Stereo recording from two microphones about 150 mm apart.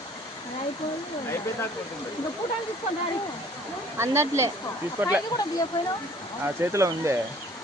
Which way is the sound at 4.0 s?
15° right (ahead or behind).